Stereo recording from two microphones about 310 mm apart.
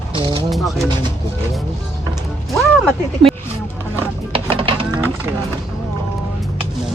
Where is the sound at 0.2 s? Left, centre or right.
Centre.